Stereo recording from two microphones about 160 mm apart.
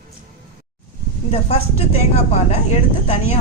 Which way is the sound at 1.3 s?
40° left (ahead or behind).